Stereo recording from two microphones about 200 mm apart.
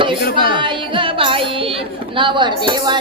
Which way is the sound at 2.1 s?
25° right (ahead or behind).